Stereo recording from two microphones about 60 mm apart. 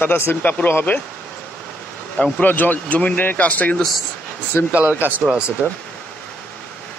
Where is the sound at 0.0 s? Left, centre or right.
Left.